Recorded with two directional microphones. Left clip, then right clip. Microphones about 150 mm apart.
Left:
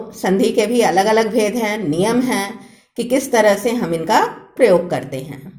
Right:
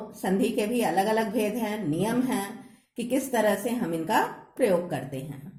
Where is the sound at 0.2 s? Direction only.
30° left (ahead or behind).